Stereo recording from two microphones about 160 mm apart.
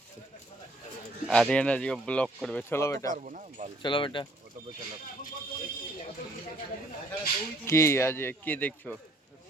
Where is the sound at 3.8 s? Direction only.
30° left (ahead or behind).